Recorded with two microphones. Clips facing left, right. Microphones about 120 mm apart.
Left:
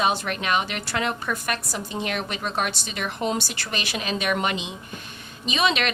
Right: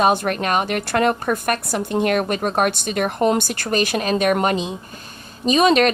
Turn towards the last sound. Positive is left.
turn(degrees=-40)  # may be behind; listen again after turning